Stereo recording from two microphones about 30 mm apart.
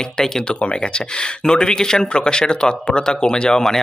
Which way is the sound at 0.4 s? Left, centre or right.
Left.